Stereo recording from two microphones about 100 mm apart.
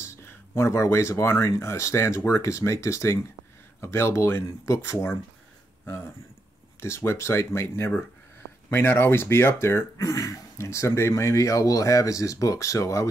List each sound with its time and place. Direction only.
0.0 s speech: 25° left (ahead or behind)
6.8 s speech: 25° left (ahead or behind)